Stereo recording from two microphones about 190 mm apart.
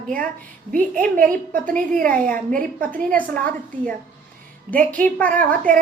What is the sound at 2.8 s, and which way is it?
A woman's voice, 10° left (ahead or behind).